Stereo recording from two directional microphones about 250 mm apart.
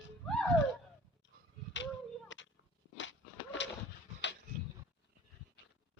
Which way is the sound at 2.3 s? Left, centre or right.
Left.